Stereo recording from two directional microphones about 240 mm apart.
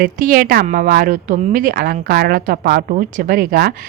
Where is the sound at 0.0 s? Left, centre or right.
Right.